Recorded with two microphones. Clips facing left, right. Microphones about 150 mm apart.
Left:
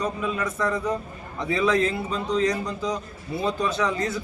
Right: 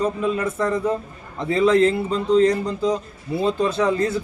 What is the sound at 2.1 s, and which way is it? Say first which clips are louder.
A man's voice: right 7 dB; 30° right (ahead or behind).